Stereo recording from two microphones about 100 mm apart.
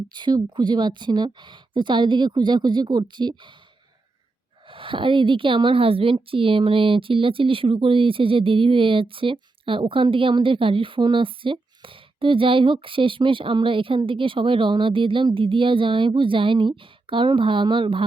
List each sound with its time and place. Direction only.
0.1 s speech: 50° right (ahead or behind)
4.7 s a woman's voice: 60° right (ahead or behind)